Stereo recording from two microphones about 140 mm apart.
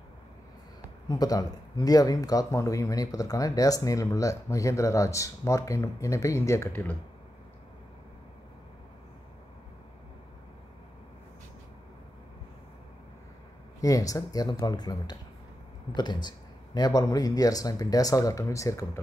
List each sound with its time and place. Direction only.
1.0 s speech: 25° left (ahead or behind)
13.7 s speech: 25° left (ahead or behind)